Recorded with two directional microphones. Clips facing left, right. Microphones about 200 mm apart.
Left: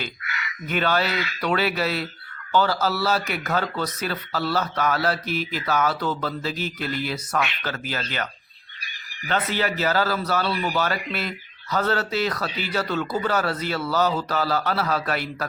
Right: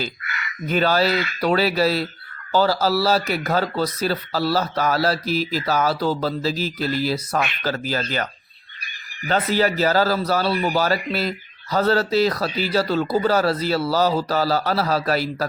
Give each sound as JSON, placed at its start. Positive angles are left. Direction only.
{"t": 0.3, "sound": "crow", "side_deg": -50}
{"t": 0.7, "sound": "a man's voice", "side_deg": -35}